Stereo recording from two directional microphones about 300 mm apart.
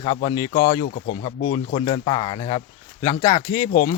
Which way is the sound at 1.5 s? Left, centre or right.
Centre.